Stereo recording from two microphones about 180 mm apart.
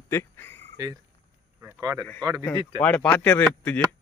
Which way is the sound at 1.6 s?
15° right (ahead or behind).